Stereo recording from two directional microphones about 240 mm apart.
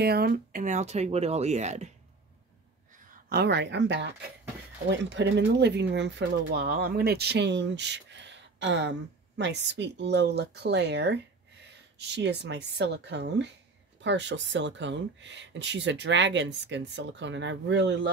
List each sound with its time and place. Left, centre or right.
0.0 s speech: right
3.3 s speech: right